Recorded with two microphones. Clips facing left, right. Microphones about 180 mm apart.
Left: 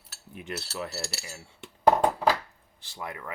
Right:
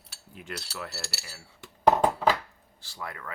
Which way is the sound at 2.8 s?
20° left (ahead or behind).